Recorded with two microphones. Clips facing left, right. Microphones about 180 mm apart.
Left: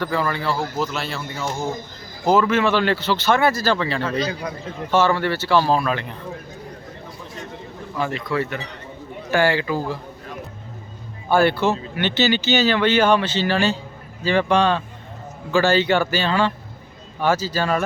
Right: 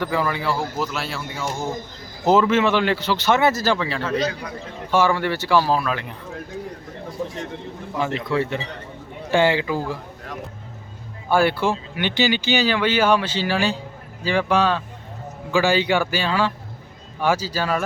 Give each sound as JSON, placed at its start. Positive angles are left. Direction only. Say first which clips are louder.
{"t": 0.0, "sound": "speech", "louder": "even", "side_deg": -15}
{"t": 2.2, "sound": "speech", "louder": "right 1 dB", "side_deg": -25}
{"t": 7.9, "sound": "speech", "louder": "right 1 dB", "side_deg": -20}
{"t": 11.3, "sound": "speech", "louder": "left 1 dB", "side_deg": -10}